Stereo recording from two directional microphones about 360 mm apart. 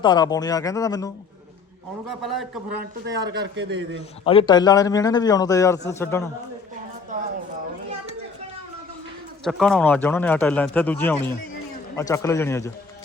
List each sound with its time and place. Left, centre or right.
0.0 s a man's voice: centre
3.2 s speech: right
4.2 s a man's voice: centre
7.1 s a sound: right
9.4 s a man's voice: centre